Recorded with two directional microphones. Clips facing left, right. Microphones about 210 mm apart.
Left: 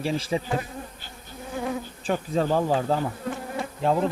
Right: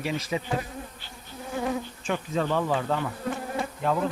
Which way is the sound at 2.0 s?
35° left (ahead or behind).